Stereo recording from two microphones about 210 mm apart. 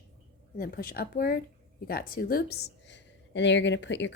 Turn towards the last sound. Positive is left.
turn(degrees=60)  # may be behind; listen again after turning